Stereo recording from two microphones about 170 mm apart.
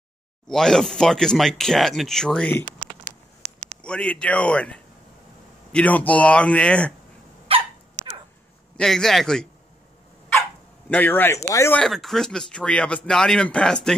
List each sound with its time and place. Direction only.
0.5 s speech: 5° left (ahead or behind)
2.8 s a sound: 50° right (ahead or behind)
3.8 s speech: 5° left (ahead or behind)
7.5 s dog: 35° right (ahead or behind)
8.7 s speech: 5° left (ahead or behind)
10.9 s speech: 10° left (ahead or behind)
11.8 s speech: centre (ahead or behind)